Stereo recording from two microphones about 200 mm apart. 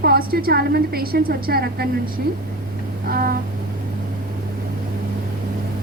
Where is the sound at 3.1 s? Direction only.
50° right (ahead or behind).